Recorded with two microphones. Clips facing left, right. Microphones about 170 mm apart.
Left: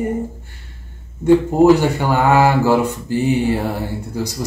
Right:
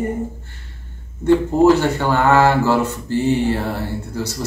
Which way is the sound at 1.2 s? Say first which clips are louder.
Left 2 dB; 15° left (ahead or behind).